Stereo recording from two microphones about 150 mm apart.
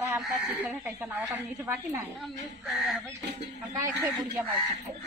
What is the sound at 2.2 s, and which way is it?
Speech, centre (ahead or behind).